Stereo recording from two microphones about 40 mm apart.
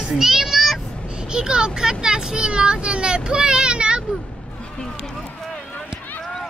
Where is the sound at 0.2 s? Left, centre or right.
Centre.